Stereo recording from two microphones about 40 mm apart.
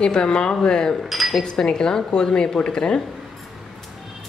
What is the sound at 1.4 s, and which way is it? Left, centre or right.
Speech, centre.